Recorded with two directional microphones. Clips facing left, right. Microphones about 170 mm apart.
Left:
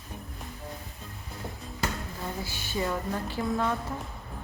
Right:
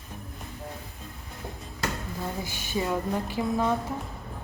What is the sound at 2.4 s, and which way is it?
Speech, 15° right (ahead or behind).